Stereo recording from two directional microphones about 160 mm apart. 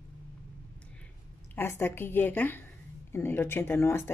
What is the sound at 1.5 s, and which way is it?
Speech, 15° left (ahead or behind).